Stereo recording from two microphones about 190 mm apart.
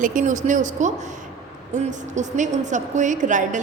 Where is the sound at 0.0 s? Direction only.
45° right (ahead or behind).